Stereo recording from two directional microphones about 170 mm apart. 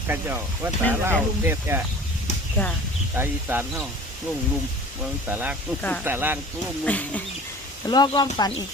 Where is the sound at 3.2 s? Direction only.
10° right (ahead or behind).